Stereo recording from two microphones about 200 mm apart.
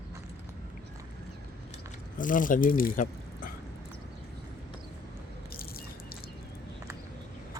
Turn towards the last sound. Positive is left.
turn(degrees=50)  # may be behind; listen again after turning